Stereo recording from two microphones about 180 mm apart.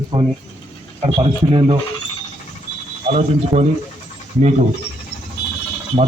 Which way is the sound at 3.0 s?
35° right (ahead or behind).